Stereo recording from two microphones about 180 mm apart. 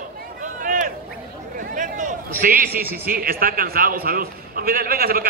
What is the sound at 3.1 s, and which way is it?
A man's voice, 55° right (ahead or behind).